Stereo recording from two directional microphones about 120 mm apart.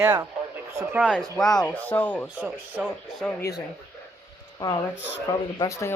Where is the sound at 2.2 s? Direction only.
10° right (ahead or behind).